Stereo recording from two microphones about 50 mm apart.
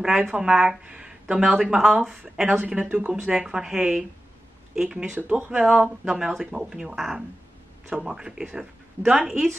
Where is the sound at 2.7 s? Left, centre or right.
Right.